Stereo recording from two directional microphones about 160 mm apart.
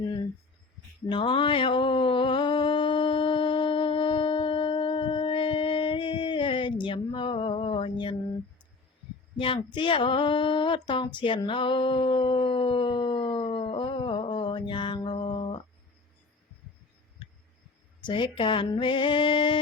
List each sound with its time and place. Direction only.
1.1 s mantra: 30° left (ahead or behind)
9.7 s a sound: 30° left (ahead or behind)
18.0 s female singing: 30° left (ahead or behind)